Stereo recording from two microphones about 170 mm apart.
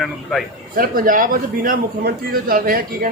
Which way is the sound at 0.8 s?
55° right (ahead or behind).